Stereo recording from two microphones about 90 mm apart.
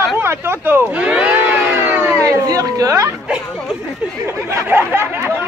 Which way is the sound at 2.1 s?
40° right (ahead or behind).